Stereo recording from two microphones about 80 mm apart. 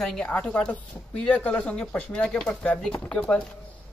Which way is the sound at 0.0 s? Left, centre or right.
Centre.